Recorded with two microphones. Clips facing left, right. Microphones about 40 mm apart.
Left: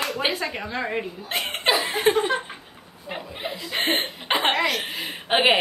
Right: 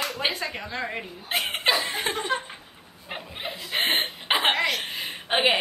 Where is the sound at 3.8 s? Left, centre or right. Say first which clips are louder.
Left 2 dB; centre.